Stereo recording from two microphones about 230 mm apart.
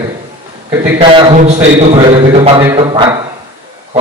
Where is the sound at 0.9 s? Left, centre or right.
Right.